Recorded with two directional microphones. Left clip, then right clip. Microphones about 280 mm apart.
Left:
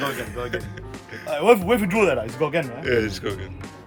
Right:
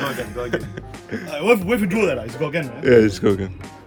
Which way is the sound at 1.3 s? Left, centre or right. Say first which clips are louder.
Left 1 dB; centre.